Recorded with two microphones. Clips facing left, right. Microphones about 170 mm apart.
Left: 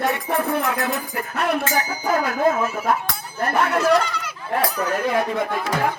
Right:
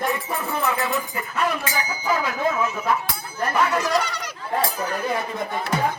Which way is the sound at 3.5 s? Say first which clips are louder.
Left 4 dB; 60° left (ahead or behind).